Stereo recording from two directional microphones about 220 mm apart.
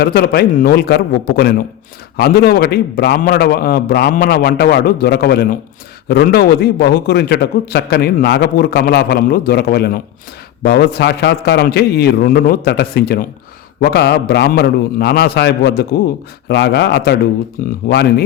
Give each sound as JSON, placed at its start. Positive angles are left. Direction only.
{"t": 0.0, "sound": "a man's voice", "side_deg": 45}